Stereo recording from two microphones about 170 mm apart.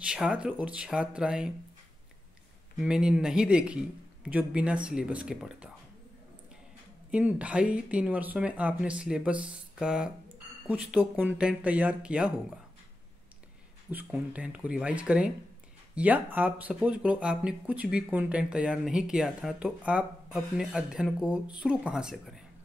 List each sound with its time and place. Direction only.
0.1 s speech: 5° right (ahead or behind)
2.8 s a man's voice: 5° right (ahead or behind)
7.1 s speech: 10° right (ahead or behind)
13.8 s a man's voice: 10° right (ahead or behind)